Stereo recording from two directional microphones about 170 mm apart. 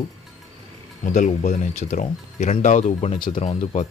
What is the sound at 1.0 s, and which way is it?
Speech, 45° left (ahead or behind).